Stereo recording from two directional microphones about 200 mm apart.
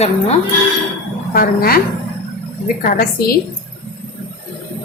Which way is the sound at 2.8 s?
45° left (ahead or behind).